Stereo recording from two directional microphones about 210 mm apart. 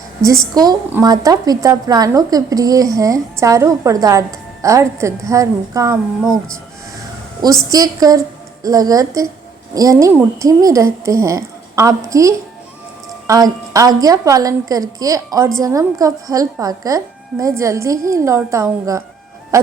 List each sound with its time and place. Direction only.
0.5 s a woman's voice: 20° right (ahead or behind)
7.7 s a woman's voice: 15° right (ahead or behind)